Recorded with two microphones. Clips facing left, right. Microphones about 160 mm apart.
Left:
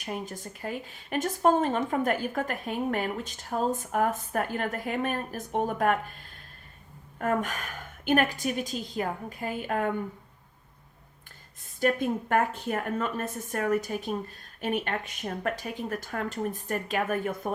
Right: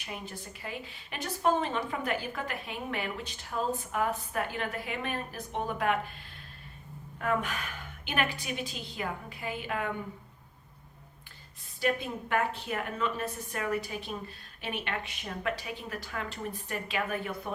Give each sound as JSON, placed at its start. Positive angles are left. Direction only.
{"t": 0.0, "sound": "speech", "side_deg": 45}
{"t": 7.2, "sound": "speech", "side_deg": 45}
{"t": 11.8, "sound": "speech", "side_deg": 50}